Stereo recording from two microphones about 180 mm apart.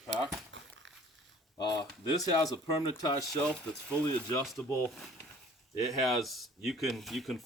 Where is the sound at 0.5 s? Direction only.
85° right.